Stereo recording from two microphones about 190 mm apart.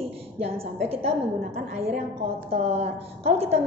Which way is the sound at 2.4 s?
30° right (ahead or behind).